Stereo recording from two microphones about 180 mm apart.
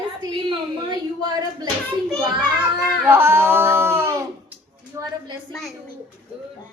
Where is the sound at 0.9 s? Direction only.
20° right (ahead or behind).